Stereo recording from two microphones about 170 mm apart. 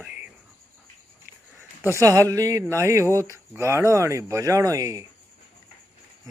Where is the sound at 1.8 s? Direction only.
20° right (ahead or behind).